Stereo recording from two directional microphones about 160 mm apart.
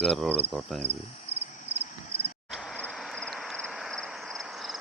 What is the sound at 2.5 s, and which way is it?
Vehicle, 5° right (ahead or behind).